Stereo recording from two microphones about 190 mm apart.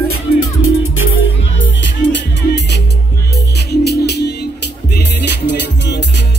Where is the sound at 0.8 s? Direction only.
90° left.